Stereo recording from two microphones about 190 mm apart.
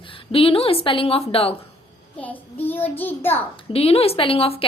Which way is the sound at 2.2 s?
10° left (ahead or behind).